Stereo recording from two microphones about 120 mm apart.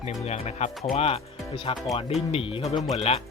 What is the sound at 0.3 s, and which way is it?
Speech, 65° left (ahead or behind).